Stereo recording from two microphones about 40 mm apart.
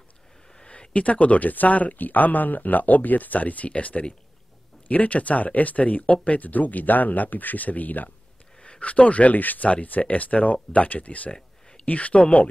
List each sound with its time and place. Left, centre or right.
0.7 s speech: left
8.6 s speech: left